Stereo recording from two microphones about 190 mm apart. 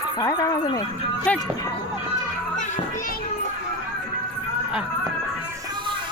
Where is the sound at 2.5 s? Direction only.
40° left (ahead or behind).